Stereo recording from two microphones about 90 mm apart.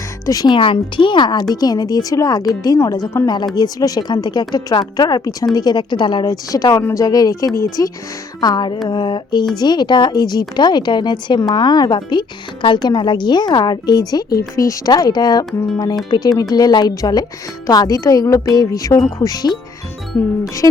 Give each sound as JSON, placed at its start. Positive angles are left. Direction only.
{"t": 0.3, "sound": "a woman's voice", "side_deg": 45}
{"t": 0.5, "sound": "a woman's voice", "side_deg": 70}
{"t": 3.2, "sound": "a woman's voice", "side_deg": 55}
{"t": 6.2, "sound": "a woman's voice", "side_deg": 45}
{"t": 8.4, "sound": "a woman's voice", "side_deg": 50}
{"t": 20.1, "sound": "speech", "side_deg": 25}